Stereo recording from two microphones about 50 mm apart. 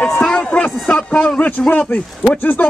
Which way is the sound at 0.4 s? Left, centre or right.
Left.